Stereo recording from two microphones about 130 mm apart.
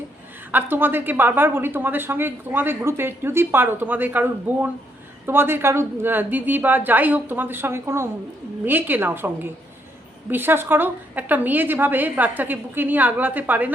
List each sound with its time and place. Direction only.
0.5 s a woman's voice: 15° right (ahead or behind)